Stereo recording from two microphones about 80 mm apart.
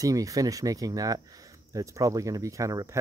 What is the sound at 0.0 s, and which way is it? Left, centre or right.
Speech, right.